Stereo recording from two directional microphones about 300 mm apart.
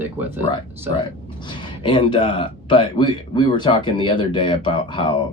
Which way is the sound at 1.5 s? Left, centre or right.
Centre.